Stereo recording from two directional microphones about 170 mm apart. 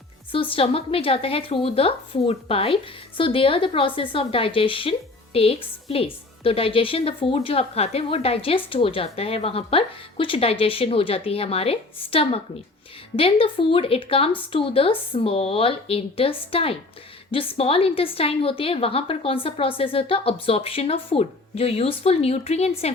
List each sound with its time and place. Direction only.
0.5 s a woman's voice: 35° left (ahead or behind)
13.4 s a woman's voice: 30° left (ahead or behind)